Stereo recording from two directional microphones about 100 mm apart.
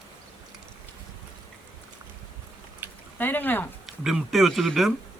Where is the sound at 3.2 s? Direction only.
20° left (ahead or behind).